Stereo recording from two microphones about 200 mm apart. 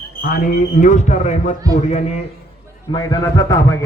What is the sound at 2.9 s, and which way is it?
Speech, 15° left (ahead or behind).